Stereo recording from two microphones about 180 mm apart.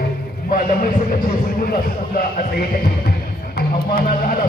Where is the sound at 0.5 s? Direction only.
50° left (ahead or behind).